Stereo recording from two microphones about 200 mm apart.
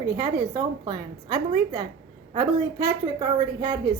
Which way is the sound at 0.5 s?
20° right (ahead or behind).